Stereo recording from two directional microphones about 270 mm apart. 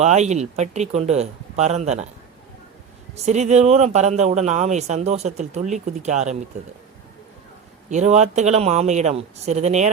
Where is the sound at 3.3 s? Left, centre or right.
Right.